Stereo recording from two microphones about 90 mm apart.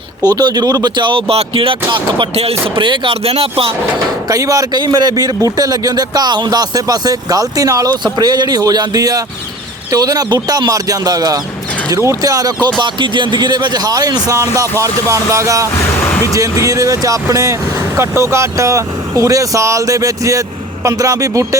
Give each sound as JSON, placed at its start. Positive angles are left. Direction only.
{"t": 0.2, "sound": "speech", "side_deg": -45}
{"t": 4.3, "sound": "a man's voice", "side_deg": -40}
{"t": 8.0, "sound": "a man's voice", "side_deg": -50}
{"t": 12.8, "sound": "a man's voice", "side_deg": -60}
{"t": 15.7, "sound": "music", "side_deg": 35}
{"t": 16.3, "sound": "speech", "side_deg": -35}